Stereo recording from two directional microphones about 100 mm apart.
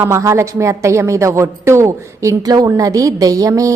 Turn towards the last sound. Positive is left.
turn(degrees=-35)  # may be behind; listen again after turning